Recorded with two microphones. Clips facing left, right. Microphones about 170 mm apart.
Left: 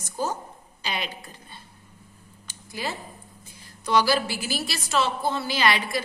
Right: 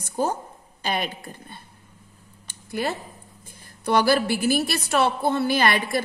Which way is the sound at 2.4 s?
60° right (ahead or behind).